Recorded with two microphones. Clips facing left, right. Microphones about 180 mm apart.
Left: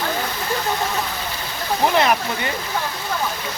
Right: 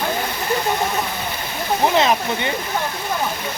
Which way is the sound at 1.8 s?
20° right (ahead or behind).